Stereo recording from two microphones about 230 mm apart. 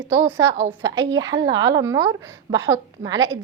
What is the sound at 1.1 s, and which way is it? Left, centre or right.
A woman's voice, centre.